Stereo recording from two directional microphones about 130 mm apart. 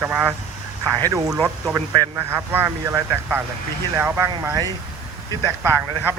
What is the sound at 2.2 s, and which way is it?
Speech, 15° right (ahead or behind).